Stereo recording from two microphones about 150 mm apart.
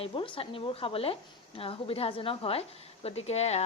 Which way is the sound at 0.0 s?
35° left (ahead or behind).